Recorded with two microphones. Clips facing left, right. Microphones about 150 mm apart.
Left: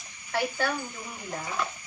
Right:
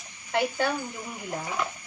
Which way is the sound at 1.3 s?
15° right (ahead or behind).